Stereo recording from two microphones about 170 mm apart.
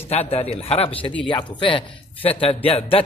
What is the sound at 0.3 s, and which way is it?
Speech, 35° left (ahead or behind).